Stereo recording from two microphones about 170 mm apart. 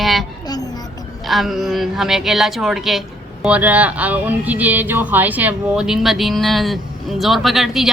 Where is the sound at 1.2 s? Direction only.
Centre (ahead or behind).